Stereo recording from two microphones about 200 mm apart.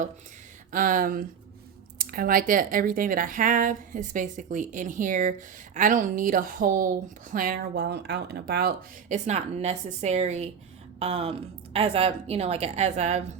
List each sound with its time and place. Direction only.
0.7 s speech: 45° right (ahead or behind)
9.0 s a woman's voice: 35° right (ahead or behind)